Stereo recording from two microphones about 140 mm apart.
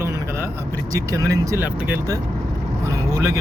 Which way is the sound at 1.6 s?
10° right (ahead or behind).